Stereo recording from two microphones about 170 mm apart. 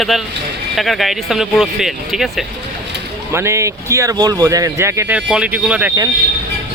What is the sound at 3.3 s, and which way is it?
Speech, 15° right (ahead or behind).